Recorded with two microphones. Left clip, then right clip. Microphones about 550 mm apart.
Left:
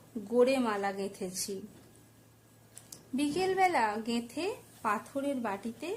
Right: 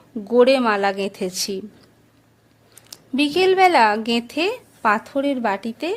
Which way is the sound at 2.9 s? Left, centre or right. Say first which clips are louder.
Right 13 dB; left.